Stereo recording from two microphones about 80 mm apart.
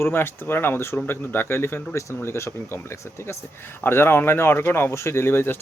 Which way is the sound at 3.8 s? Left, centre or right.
Left.